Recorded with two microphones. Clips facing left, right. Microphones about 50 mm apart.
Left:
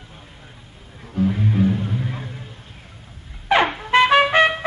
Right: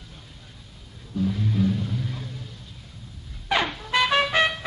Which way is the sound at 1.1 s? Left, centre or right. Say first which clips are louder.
Left 5 dB; left.